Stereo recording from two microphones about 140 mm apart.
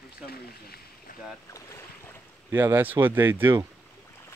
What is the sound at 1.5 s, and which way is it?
Boat, 20° left (ahead or behind).